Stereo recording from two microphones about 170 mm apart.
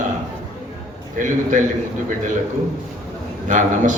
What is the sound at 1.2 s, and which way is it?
Speech, 50° right (ahead or behind).